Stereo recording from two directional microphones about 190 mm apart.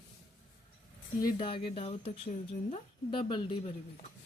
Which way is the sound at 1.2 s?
25° left (ahead or behind).